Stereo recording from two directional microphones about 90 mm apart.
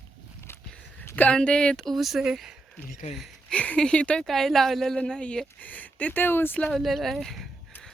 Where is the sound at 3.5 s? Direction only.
15° left (ahead or behind).